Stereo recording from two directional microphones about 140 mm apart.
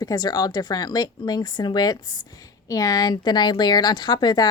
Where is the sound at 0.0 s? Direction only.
30° left (ahead or behind).